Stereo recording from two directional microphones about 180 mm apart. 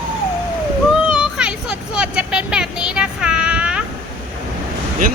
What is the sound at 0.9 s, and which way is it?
Vehicle, 5° right (ahead or behind).